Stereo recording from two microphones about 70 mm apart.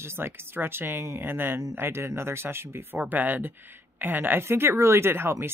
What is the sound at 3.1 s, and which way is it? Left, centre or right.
Speech, right.